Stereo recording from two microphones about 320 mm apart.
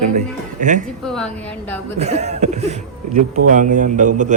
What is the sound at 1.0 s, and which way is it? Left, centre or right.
Speech, centre.